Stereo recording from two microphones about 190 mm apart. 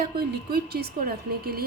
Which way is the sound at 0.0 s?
55° right (ahead or behind).